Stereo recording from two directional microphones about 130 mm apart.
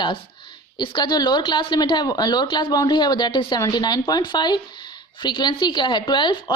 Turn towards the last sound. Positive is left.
turn(degrees=40)  # may be behind; listen again after turning